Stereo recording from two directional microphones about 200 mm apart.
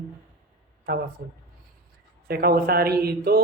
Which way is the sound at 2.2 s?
50° right (ahead or behind).